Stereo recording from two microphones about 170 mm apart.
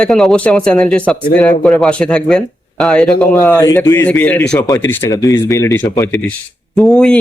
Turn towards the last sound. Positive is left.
turn(degrees=5)  # may be behind; listen again after turning